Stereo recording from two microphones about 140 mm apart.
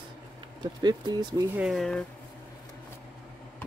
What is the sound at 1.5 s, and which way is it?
Speech, 5° right (ahead or behind).